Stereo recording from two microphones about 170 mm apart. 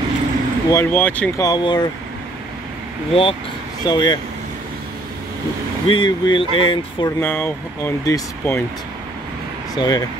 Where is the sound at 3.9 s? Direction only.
25° left (ahead or behind).